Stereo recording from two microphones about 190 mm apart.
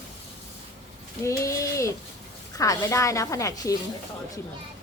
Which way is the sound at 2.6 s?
15° left (ahead or behind).